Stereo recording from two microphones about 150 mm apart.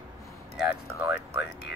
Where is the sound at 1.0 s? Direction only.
20° right (ahead or behind).